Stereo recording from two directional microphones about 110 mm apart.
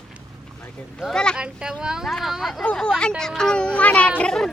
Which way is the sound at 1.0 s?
5° left (ahead or behind).